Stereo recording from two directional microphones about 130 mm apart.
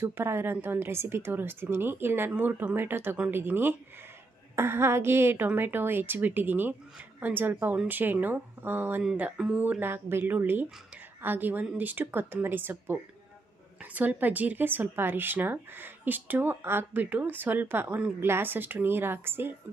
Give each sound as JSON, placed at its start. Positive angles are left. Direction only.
{"t": 0.0, "sound": "speech", "side_deg": -20}